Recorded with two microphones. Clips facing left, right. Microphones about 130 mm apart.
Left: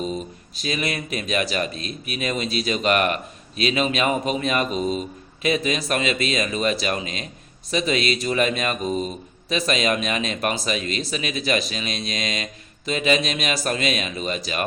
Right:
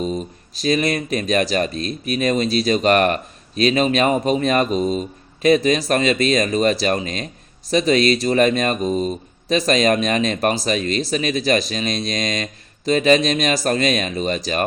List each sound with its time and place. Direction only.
0.5 s speech: 40° right (ahead or behind)